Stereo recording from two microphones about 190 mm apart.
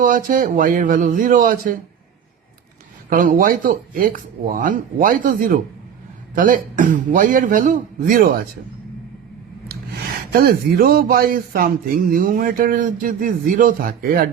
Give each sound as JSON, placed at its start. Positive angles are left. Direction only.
{"t": 0.0, "sound": "speech", "side_deg": -45}
{"t": 3.1, "sound": "speech", "side_deg": -45}
{"t": 10.3, "sound": "speech", "side_deg": -50}